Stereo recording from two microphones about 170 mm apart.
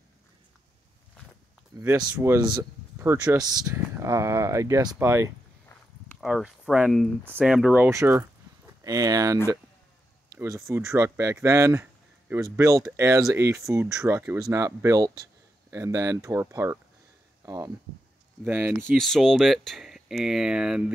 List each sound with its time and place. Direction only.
1.7 s speech: 20° right (ahead or behind)
6.2 s speech: 5° right (ahead or behind)
18.4 s speech: 10° right (ahead or behind)
18.9 s speech: centre (ahead or behind)